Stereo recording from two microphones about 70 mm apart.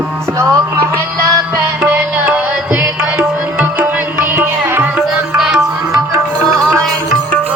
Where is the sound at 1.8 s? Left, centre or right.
Right.